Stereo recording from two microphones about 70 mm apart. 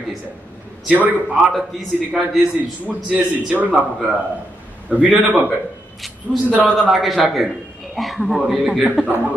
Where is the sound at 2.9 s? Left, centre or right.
Centre.